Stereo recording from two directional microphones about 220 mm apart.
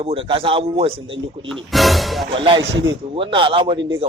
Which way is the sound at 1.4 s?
Centre (ahead or behind).